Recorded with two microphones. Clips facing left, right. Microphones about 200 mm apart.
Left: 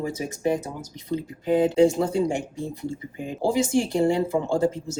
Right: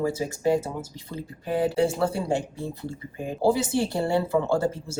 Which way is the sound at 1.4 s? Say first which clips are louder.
Left 5 dB; 20° left (ahead or behind).